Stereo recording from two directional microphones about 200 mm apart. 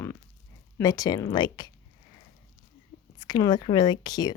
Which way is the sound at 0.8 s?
15° left (ahead or behind).